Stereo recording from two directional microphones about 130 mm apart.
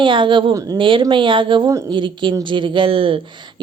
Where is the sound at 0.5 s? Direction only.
25° right (ahead or behind).